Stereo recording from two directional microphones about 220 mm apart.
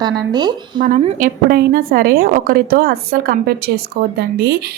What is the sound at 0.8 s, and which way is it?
A woman's voice, 35° right (ahead or behind).